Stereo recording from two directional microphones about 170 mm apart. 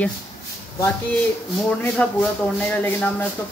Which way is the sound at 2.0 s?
5° left (ahead or behind).